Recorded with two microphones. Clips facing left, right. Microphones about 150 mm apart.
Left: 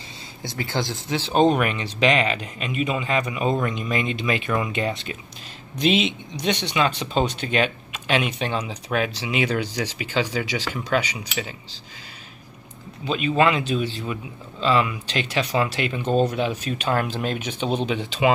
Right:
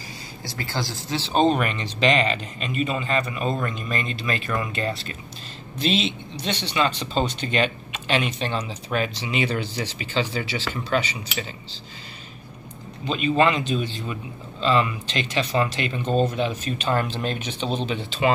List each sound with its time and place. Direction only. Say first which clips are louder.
0.4 s speech: left 3 dB; 20° left (ahead or behind)
1.3 s speech: left 2 dB; 10° left (ahead or behind)
13.0 s speech: even; 5° left (ahead or behind)